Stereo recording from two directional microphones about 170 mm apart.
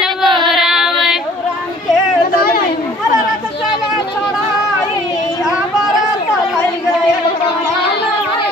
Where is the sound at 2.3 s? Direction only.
60° left (ahead or behind).